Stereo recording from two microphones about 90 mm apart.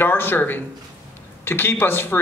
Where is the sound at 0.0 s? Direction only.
25° left (ahead or behind).